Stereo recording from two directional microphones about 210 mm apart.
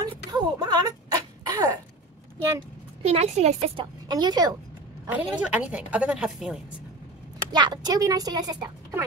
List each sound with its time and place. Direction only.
0.0 s a sound: 20° right (ahead or behind)
2.3 s speech: 10° right (ahead or behind)
3.0 s a woman's voice: 30° right (ahead or behind)
4.1 s a woman's voice: 20° right (ahead or behind)
5.0 s a woman's voice: 5° right (ahead or behind)
7.5 s a woman's voice: 20° right (ahead or behind)